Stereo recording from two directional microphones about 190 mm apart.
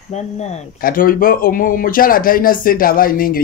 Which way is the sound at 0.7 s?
50° left (ahead or behind).